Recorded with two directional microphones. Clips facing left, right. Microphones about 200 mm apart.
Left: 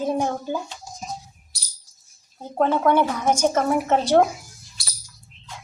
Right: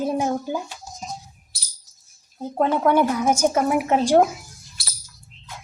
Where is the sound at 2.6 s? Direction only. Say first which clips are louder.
Even; 10° right (ahead or behind).